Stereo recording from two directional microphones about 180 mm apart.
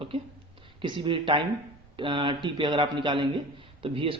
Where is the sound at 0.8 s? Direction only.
30° right (ahead or behind).